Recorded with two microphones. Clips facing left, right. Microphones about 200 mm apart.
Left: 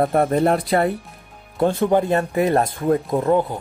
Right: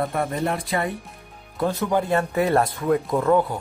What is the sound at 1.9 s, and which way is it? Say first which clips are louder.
Speech: left 4 dB; 20° left (ahead or behind).